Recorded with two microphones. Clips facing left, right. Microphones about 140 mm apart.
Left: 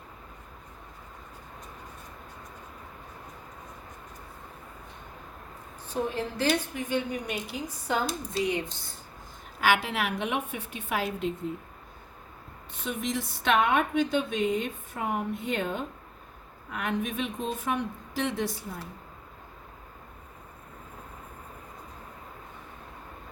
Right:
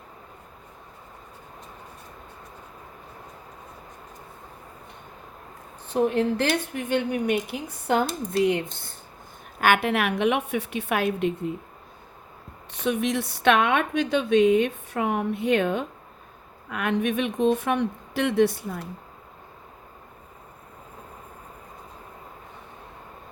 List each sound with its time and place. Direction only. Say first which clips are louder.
5.9 s a woman's voice: right 8 dB; 65° right (ahead or behind)
12.7 s a woman's voice: right 7 dB; 75° right (ahead or behind)